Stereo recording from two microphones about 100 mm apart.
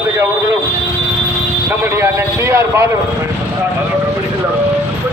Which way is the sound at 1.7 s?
25° right (ahead or behind).